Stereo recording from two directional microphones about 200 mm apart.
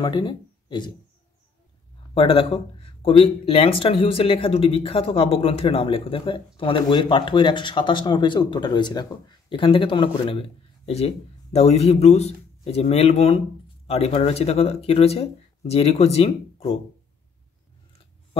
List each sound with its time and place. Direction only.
0.0 s speech: 20° left (ahead or behind)
2.1 s speech: 25° left (ahead or behind)